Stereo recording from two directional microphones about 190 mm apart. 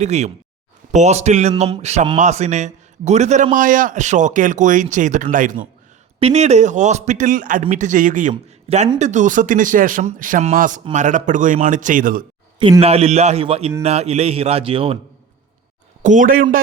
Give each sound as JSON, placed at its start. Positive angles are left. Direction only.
{"t": 0.0, "sound": "speech", "side_deg": -35}
{"t": 6.1, "sound": "speech", "side_deg": -35}
{"t": 12.8, "sound": "speech", "side_deg": -30}
{"t": 16.0, "sound": "speech", "side_deg": -45}